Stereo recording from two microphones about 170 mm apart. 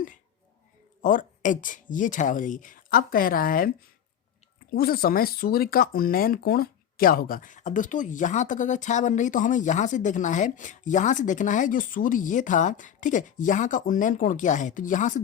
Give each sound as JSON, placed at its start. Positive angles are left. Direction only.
{"t": 1.0, "sound": "speech", "side_deg": 50}
{"t": 4.7, "sound": "speech", "side_deg": 60}